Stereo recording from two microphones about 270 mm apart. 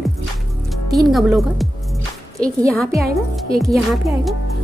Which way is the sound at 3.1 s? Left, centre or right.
Right.